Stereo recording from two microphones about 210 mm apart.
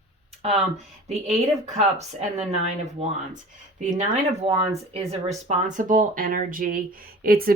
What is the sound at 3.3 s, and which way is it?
Speech, 35° right (ahead or behind).